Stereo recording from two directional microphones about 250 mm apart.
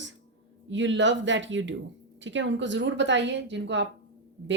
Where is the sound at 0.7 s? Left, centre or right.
Right.